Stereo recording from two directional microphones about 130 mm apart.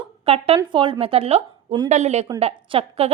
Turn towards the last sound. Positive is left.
turn(degrees=-50)  # may be behind; listen again after turning